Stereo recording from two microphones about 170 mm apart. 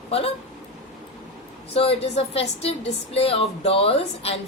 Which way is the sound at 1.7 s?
35° left (ahead or behind).